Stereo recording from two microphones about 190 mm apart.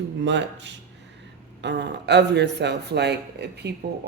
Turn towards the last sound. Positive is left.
turn(degrees=-60)  # may be behind; listen again after turning